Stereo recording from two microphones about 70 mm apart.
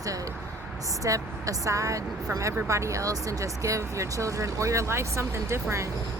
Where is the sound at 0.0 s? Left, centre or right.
Right.